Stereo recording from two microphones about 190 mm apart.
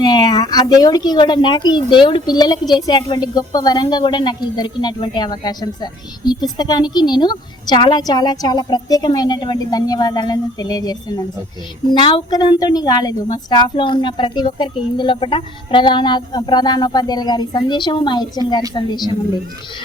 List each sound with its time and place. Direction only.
0.0 s speech: 20° left (ahead or behind)
12.0 s speech: 25° left (ahead or behind)